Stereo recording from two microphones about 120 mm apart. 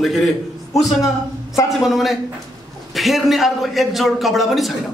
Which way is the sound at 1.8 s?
Centre (ahead or behind).